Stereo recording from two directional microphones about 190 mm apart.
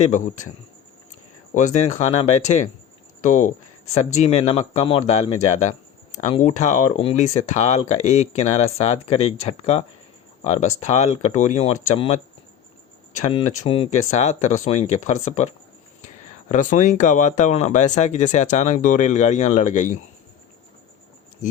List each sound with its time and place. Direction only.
0.0 s speech: 40° left (ahead or behind)
1.5 s speech: 40° left (ahead or behind)
13.3 s speech: 30° left (ahead or behind)
21.4 s speech: 40° left (ahead or behind)